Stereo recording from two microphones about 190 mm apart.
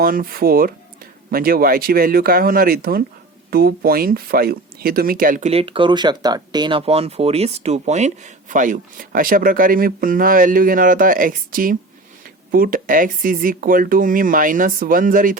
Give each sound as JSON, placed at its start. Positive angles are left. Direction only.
{"t": 0.0, "sound": "speech", "side_deg": -50}
{"t": 5.5, "sound": "speech", "side_deg": -30}